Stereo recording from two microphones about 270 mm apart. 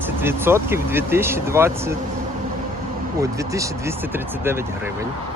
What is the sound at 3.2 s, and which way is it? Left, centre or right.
Speech, centre.